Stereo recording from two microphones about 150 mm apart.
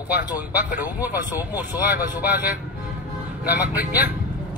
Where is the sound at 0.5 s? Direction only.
10° right (ahead or behind).